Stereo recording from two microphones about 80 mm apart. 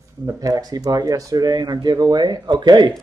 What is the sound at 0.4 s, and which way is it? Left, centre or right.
Speech, right.